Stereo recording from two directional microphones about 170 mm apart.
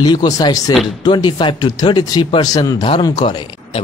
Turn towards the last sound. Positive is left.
turn(degrees=25)  # may be behind; listen again after turning